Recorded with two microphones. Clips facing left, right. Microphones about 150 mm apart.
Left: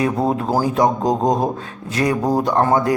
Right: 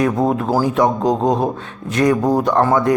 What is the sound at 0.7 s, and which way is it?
Speech, 35° left (ahead or behind).